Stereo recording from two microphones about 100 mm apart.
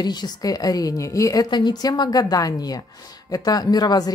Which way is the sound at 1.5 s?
45° left (ahead or behind).